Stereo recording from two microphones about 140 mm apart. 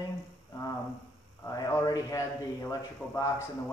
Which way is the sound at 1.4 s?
25° left (ahead or behind).